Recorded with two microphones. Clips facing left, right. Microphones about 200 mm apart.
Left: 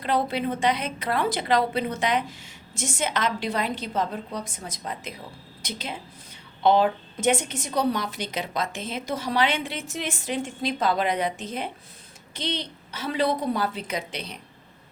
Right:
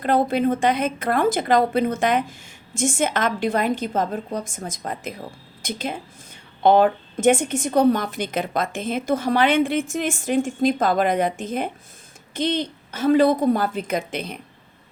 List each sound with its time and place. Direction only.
0.0 s a woman's voice: 50° right (ahead or behind)